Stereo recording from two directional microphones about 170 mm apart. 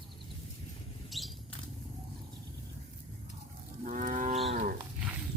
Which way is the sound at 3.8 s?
50° right (ahead or behind).